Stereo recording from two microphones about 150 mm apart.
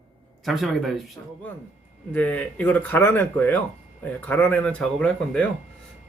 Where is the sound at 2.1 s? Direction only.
10° left (ahead or behind).